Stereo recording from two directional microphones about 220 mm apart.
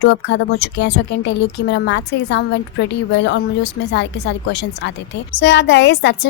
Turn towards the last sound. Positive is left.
turn(degrees=50)  # may be behind; listen again after turning